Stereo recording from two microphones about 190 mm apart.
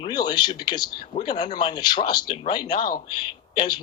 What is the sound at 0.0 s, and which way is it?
A woman's voice, 25° left (ahead or behind).